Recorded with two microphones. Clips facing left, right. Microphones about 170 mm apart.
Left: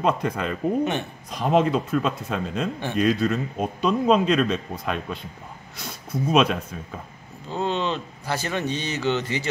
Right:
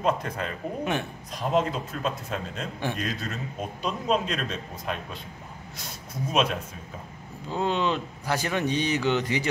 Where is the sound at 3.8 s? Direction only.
75° left (ahead or behind).